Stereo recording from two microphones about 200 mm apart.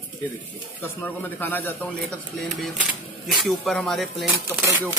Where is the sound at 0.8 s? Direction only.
10° left (ahead or behind).